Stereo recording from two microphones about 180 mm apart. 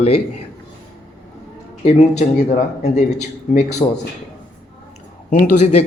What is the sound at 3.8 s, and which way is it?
Speech, 30° left (ahead or behind).